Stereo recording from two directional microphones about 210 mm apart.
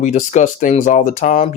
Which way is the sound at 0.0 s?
35° left (ahead or behind).